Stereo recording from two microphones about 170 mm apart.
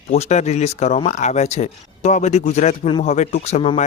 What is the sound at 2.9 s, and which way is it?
Speech, 30° left (ahead or behind).